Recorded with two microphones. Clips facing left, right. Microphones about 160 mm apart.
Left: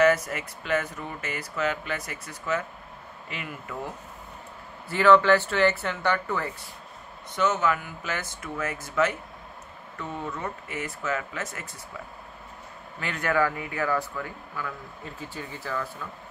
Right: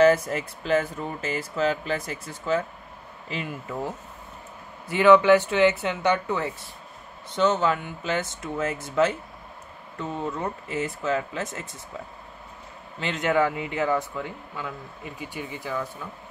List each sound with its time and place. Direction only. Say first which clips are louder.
0.0 s speech: right 3 dB; 30° right (ahead or behind)
10.3 s speech: right 4 dB; 30° right (ahead or behind)
13.0 s speech: right 3 dB; 20° right (ahead or behind)